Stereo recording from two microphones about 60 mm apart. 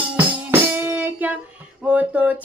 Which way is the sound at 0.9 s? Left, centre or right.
Right.